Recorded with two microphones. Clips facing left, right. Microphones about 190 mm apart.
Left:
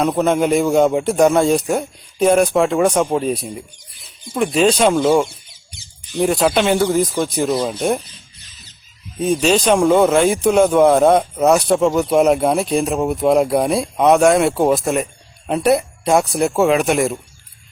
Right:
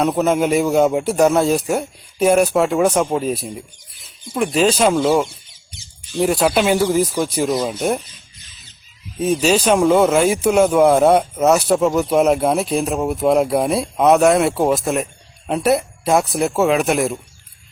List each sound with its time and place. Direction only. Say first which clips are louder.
0.0 s speech: left 1 dB; 5° right (ahead or behind)
5.7 s squawk: even; 15° left (ahead or behind)
6.2 s speech: even; 5° right (ahead or behind)
9.1 s speech: left 1 dB; 5° right (ahead or behind)